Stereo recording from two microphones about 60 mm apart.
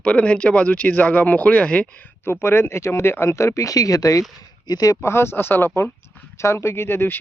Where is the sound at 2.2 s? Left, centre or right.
Left.